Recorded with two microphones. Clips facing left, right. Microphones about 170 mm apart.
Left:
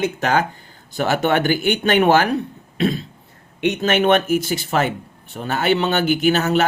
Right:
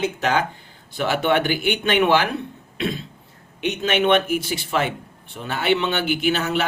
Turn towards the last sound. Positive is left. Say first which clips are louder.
# left 5 dB
turn(degrees=45)  # may be behind; listen again after turning